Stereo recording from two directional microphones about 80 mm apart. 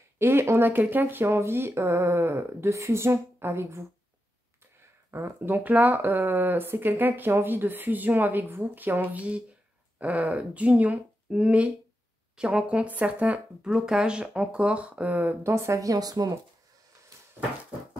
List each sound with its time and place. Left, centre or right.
0.2 s speech: right
5.1 s speech: right
15.4 s speech: right